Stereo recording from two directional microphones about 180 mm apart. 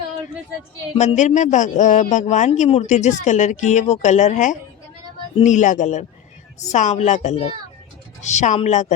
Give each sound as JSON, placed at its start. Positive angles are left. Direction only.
{"t": 0.9, "sound": "a man's voice", "side_deg": 40}